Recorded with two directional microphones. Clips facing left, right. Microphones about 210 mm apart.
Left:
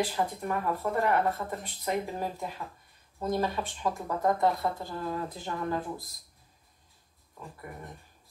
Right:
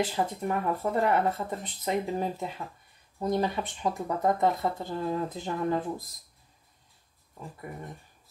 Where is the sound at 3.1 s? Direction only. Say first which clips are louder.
Right 2 dB; 15° right (ahead or behind).